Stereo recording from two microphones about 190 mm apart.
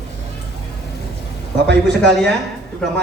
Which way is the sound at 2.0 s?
5° left (ahead or behind).